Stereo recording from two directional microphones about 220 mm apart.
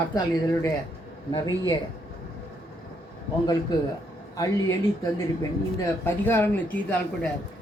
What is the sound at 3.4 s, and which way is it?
Speech, 20° left (ahead or behind).